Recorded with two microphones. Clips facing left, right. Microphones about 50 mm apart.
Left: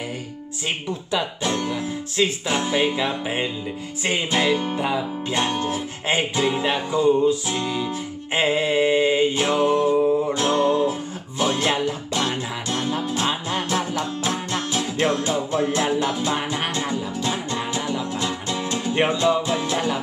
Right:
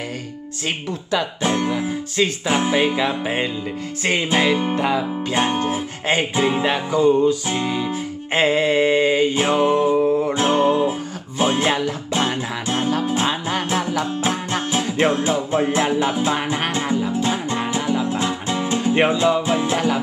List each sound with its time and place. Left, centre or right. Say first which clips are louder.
1.4 s music: right 4 dB; right
8.3 s mantra: right 3 dB; centre
9.3 s music: right 2 dB; right